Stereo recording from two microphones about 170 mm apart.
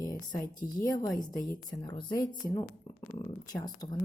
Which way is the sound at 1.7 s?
25° left (ahead or behind).